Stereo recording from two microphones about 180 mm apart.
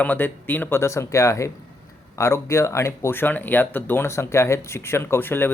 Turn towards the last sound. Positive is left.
turn(degrees=10)  # may be behind; listen again after turning